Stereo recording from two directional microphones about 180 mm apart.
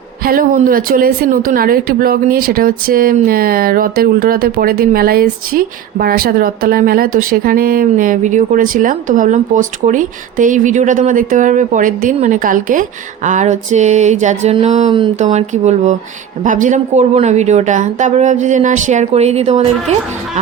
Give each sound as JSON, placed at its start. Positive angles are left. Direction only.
{"t": 0.2, "sound": "a woman's voice", "side_deg": -55}